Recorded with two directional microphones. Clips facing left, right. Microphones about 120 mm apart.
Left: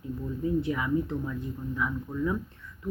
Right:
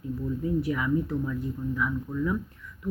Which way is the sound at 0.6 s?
25° left (ahead or behind).